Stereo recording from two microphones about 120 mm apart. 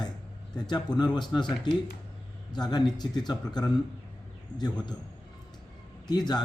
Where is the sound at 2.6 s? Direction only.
35° left (ahead or behind).